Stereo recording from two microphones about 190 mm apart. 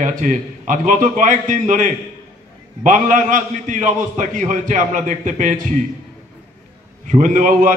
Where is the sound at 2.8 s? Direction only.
40° right (ahead or behind).